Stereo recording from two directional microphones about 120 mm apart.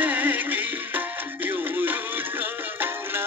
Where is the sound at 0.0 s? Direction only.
15° right (ahead or behind).